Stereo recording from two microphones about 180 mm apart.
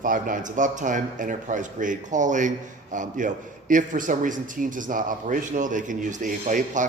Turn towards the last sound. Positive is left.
turn(degrees=-45)  # may be behind; listen again after turning